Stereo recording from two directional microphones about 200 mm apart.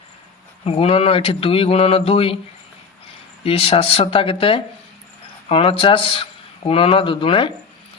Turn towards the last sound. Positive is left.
turn(degrees=25)  # may be behind; listen again after turning